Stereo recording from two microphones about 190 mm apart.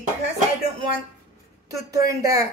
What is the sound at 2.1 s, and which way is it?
Speech, 15° right (ahead or behind).